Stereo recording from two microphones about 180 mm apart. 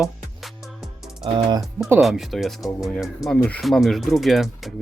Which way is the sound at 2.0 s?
Centre (ahead or behind).